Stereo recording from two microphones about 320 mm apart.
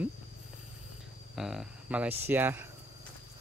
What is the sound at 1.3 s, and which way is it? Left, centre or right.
Speech, centre.